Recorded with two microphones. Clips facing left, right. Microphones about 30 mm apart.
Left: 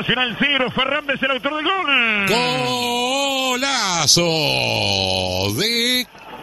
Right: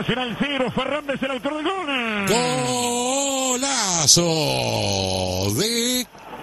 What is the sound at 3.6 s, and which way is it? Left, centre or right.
A man's voice, left.